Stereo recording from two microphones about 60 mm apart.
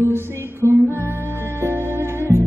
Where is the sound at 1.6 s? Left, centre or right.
Right.